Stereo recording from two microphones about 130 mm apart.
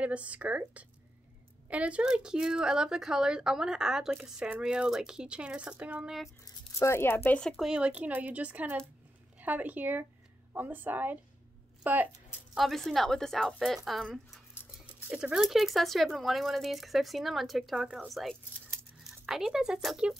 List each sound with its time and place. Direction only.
0.0 s speech: 10° right (ahead or behind)
6.4 s speech: 20° left (ahead or behind)
7.2 s speech: 5° left (ahead or behind); by 12.1 s 15° right (ahead or behind)
12.5 s speech: centre (ahead or behind)